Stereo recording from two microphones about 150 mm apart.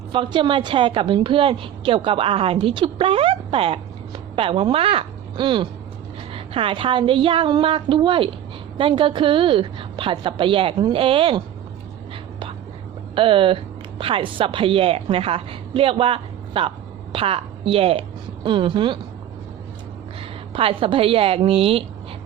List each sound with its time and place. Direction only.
0.1 s a woman's voice: 35° right (ahead or behind)
13.1 s a woman's voice: 35° right (ahead or behind)
20.5 s a woman's voice: 35° right (ahead or behind)